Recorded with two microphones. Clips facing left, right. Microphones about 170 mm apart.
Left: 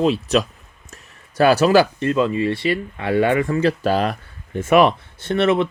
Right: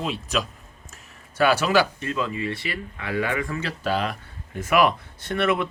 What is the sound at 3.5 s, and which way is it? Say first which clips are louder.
Speech: left 9 dB; 40° left (ahead or behind).